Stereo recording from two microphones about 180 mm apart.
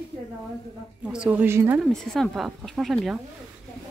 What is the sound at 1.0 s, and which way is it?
Speech, 5° right (ahead or behind).